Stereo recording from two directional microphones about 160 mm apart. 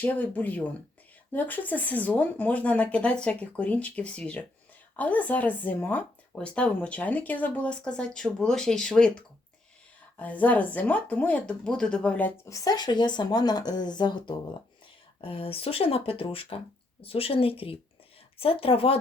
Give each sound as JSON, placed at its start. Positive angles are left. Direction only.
{"t": 0.0, "sound": "speech", "side_deg": 10}
{"t": 10.2, "sound": "speech", "side_deg": 10}
{"t": 12.5, "sound": "a woman's voice", "side_deg": 20}